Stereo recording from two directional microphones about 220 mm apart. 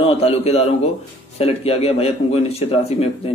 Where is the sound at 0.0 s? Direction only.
25° left (ahead or behind).